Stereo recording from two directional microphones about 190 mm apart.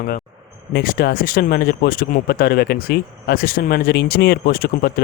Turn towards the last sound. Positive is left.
turn(degrees=50)  # may be behind; listen again after turning